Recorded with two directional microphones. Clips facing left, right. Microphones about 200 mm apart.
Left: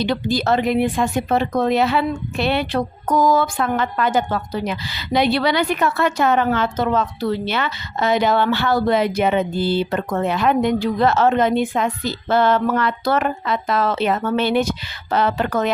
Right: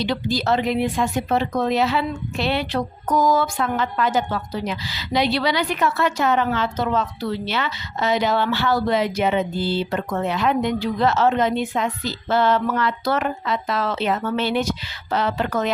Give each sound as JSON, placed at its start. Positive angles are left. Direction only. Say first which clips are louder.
{"t": 0.0, "sound": "speech", "louder": "left 3 dB", "side_deg": 50}